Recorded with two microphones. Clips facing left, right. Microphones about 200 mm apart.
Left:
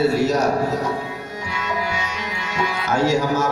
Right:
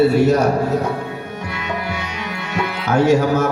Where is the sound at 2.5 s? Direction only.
60° right (ahead or behind).